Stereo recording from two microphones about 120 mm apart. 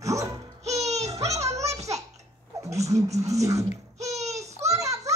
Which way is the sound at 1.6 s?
65° right (ahead or behind).